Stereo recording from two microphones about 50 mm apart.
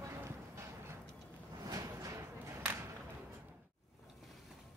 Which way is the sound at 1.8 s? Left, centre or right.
Right.